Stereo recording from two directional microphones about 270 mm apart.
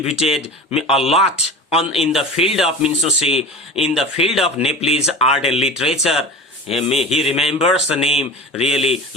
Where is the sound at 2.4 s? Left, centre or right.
Centre.